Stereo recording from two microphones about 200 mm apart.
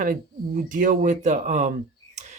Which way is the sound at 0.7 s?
40° right (ahead or behind).